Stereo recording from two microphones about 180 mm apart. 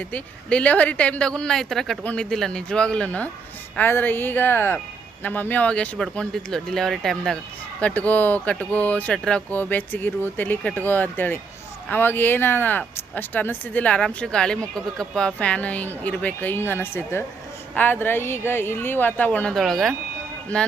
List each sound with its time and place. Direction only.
0.1 s speech: 10° left (ahead or behind)